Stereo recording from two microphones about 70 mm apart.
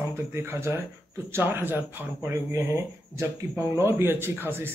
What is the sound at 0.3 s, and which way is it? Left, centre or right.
Speech, right.